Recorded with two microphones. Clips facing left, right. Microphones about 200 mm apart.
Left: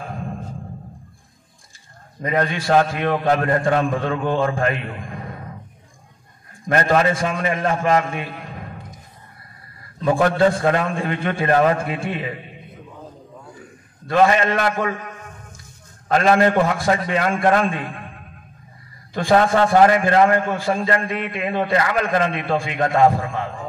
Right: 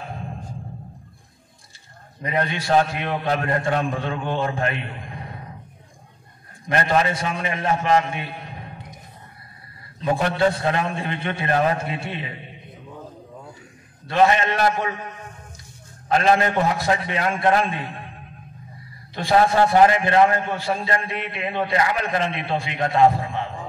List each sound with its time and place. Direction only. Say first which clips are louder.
2.3 s a man's voice: left 2 dB; 50° left (ahead or behind)
6.7 s a man's voice: left 3 dB; 45° left (ahead or behind)
9.9 s a man's voice: left 4 dB; 50° left (ahead or behind)
14.0 s a man's voice: left 2 dB; 50° left (ahead or behind)
16.1 s a man's voice: left 3 dB; 50° left (ahead or behind)
19.1 s a man's voice: left 2 dB; 50° left (ahead or behind)